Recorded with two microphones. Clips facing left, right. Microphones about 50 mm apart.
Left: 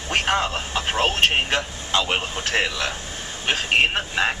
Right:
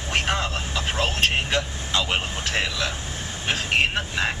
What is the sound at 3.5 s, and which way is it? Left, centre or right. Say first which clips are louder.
Speech: left 3 dB; left.